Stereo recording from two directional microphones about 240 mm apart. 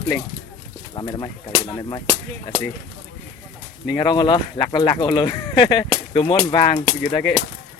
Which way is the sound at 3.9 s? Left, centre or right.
Centre.